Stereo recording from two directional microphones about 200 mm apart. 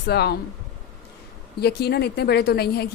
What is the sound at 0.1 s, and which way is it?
Speech, 55° left (ahead or behind).